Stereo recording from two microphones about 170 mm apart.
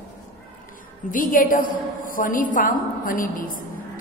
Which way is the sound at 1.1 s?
55° left (ahead or behind).